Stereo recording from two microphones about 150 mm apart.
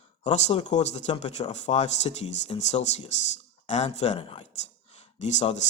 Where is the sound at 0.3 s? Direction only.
50° left (ahead or behind).